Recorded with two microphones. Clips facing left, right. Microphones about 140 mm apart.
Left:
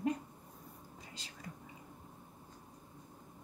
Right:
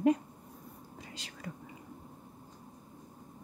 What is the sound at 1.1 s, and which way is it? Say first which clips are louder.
Whispering: right 5 dB; 70° right (ahead or behind).